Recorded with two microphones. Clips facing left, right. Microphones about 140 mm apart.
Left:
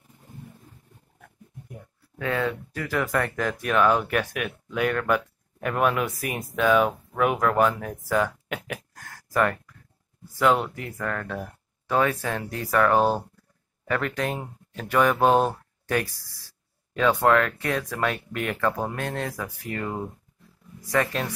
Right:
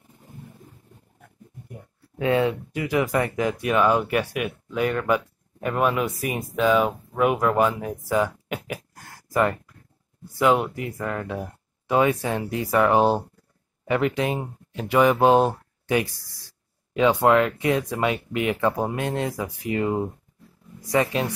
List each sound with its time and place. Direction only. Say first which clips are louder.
2.1 s speech: right 5 dB; 25° right (ahead or behind)
2.7 s speech: right 3 dB; 10° right (ahead or behind)